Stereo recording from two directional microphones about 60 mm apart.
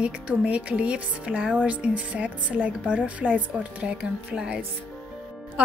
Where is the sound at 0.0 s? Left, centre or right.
Centre.